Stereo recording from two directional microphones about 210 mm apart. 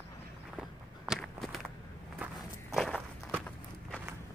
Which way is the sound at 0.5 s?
5° right (ahead or behind).